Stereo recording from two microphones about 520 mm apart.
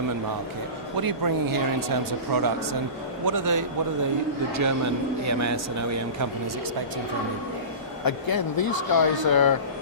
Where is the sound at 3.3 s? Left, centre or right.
Right.